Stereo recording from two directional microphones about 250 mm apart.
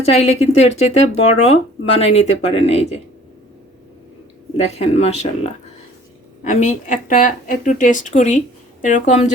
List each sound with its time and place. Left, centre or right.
0.0 s speech: left
4.5 s speech: left